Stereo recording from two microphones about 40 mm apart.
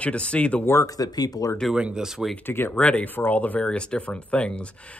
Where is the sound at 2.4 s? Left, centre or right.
Left.